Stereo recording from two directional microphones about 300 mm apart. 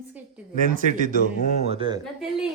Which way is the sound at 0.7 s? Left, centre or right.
Right.